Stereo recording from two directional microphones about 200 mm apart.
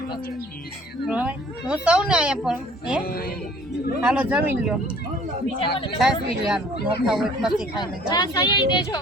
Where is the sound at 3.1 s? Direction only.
50° left (ahead or behind).